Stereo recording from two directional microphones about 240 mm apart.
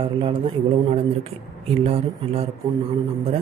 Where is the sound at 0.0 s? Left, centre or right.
Right.